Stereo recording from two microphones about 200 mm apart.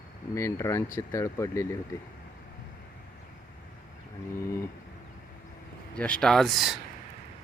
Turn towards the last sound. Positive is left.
turn(degrees=0)  # may be behind; listen again after turning